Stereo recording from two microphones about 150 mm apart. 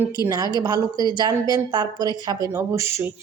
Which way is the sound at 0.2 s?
25° right (ahead or behind).